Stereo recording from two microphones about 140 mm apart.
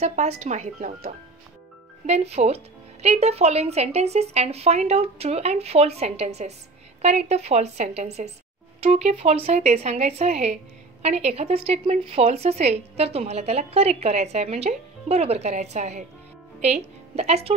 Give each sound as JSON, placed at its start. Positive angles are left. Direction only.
{"t": 0.0, "sound": "speech", "side_deg": -55}
{"t": 2.0, "sound": "a woman's voice", "side_deg": -50}